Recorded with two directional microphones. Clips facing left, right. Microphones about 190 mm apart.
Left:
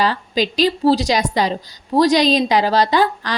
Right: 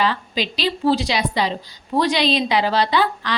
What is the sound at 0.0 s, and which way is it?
A woman's voice, 40° left (ahead or behind).